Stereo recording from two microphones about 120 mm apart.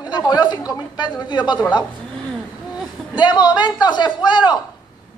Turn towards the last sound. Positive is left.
turn(degrees=35)  # may be behind; listen again after turning